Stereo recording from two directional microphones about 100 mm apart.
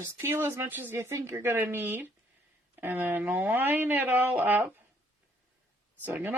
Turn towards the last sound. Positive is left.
turn(degrees=-20)  # may be behind; listen again after turning